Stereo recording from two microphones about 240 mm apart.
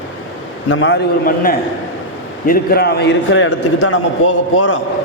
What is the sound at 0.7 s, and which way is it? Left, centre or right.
Speech, left.